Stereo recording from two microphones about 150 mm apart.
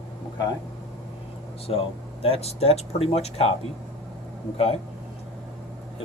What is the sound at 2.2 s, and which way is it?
Speech, 40° left (ahead or behind).